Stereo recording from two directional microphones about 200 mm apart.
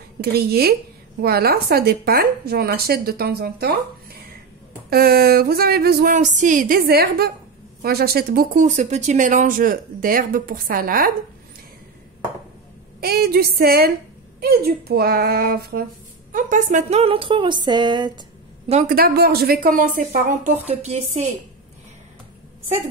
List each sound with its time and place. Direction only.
0.2 s speech: 50° right (ahead or behind)
13.0 s speech: 50° right (ahead or behind); by 18.2 s 20° right (ahead or behind)
18.7 s speech: 35° right (ahead or behind)
18.9 s speech: 50° right (ahead or behind); by 21.2 s 30° right (ahead or behind)